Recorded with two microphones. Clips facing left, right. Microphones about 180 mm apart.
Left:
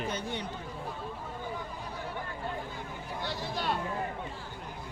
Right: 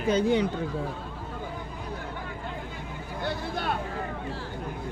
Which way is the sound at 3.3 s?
55° right (ahead or behind).